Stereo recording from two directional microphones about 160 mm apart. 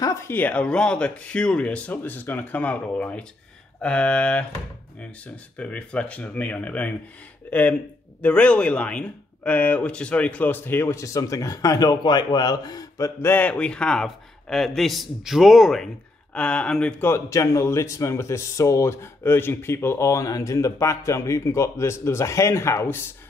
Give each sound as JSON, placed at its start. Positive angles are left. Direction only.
{"t": 0.0, "sound": "speech", "side_deg": 15}